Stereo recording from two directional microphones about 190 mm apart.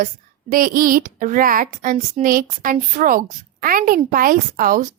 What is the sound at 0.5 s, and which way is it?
A woman's voice, 45° right (ahead or behind).